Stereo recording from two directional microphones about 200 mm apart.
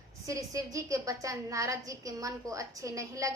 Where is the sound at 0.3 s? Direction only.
15° right (ahead or behind).